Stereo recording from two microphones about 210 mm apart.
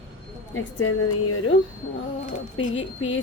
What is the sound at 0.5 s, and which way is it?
Speech, 90° left.